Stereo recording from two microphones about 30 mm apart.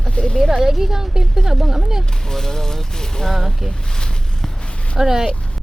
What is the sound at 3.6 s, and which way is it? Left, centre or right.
Speech, left.